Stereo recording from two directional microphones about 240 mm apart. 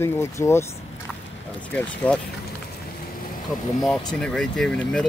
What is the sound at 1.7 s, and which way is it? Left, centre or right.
Speech, centre.